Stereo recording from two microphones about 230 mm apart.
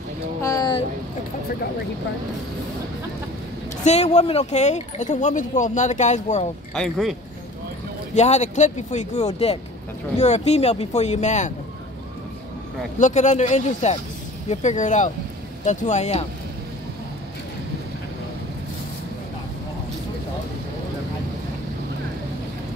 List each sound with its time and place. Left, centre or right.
0.4 s a sound: centre
3.8 s speech: left
6.7 s speech: centre
8.1 s speech: left
13.0 s speech: left